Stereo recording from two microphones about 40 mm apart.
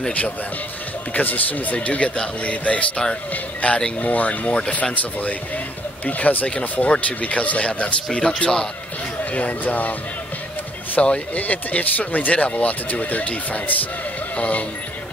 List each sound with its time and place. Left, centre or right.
1.1 s speech: left
6.0 s a man's voice: left; by 8.6 s centre
9.2 s speech: left
11.0 s a man's voice: left
11.3 s speech: left